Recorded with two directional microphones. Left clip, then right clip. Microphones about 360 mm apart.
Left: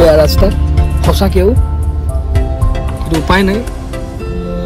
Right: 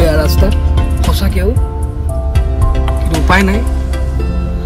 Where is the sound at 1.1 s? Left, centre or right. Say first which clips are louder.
Left 8 dB; centre.